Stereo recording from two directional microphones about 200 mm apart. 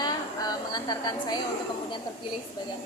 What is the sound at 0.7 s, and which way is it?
Speech, 20° left (ahead or behind).